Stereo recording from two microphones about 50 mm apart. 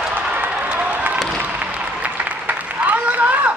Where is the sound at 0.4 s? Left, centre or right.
Right.